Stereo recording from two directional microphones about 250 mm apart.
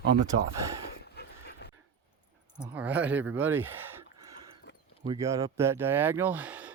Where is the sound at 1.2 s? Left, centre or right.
Left.